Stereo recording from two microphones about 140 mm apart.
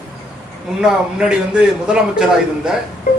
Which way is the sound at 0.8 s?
5° right (ahead or behind).